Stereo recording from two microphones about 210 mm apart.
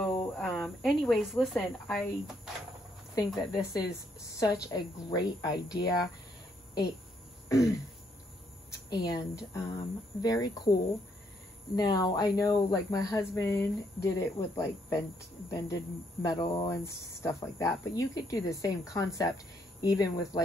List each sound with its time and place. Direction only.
0.0 s speech: centre (ahead or behind)
3.3 s a woman's voice: 15° left (ahead or behind)
7.4 s throat clearing: 15° left (ahead or behind)
8.9 s a woman's voice: 20° left (ahead or behind)
11.7 s a woman's voice: 20° left (ahead or behind)